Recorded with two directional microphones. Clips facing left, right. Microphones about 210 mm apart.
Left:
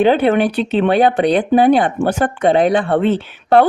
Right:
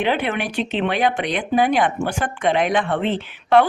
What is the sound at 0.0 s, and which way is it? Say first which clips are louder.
Speech: left 9 dB; 35° left (ahead or behind).